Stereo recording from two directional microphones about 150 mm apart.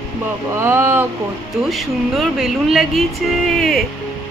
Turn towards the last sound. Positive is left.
turn(degrees=0)  # may be behind; listen again after turning